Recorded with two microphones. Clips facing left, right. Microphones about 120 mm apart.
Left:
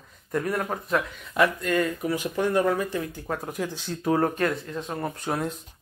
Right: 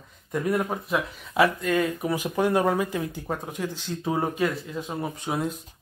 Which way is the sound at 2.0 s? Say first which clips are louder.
Right 1 dB; 20° right (ahead or behind).